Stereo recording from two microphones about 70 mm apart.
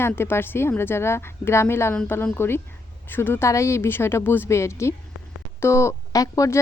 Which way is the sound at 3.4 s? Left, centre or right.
Left.